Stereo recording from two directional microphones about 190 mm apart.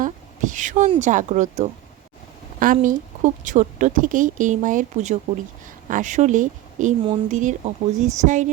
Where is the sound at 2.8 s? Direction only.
40° right (ahead or behind).